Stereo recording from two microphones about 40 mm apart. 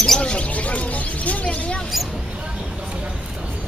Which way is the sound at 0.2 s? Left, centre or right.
Left.